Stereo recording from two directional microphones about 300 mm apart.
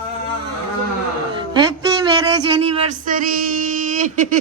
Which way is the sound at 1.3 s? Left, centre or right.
Centre.